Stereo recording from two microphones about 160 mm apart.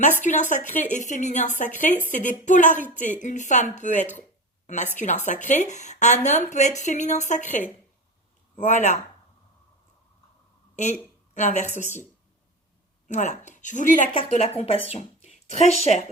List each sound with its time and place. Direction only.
0.2 s a woman's voice: 50° left (ahead or behind)
11.3 s speech: 45° left (ahead or behind)
13.1 s a woman's voice: 50° left (ahead or behind)
14.1 s speech: 40° left (ahead or behind)